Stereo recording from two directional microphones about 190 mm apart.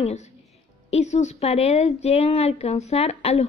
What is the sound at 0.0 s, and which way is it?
A woman's voice, 35° left (ahead or behind).